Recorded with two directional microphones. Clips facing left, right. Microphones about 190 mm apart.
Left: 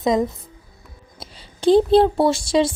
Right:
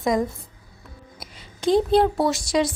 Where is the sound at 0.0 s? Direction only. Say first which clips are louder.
Left 3 dB; 20° left (ahead or behind).